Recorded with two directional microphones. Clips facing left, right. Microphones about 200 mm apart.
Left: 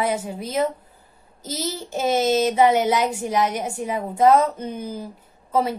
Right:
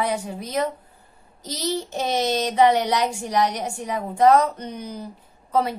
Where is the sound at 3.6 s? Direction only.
25° left (ahead or behind).